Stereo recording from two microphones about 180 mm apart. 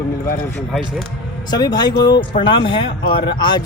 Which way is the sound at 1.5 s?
20° left (ahead or behind).